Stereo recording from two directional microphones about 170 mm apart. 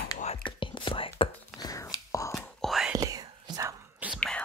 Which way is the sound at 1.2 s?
20° left (ahead or behind).